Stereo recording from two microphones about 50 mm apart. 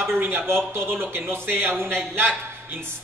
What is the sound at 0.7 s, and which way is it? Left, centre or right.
Speech, right.